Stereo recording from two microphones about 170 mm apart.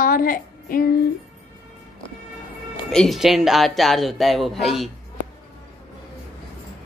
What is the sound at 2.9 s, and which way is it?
A man's voice, centre (ahead or behind).